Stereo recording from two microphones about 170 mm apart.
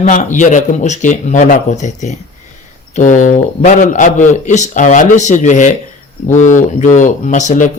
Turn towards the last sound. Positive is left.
turn(degrees=45)  # may be behind; listen again after turning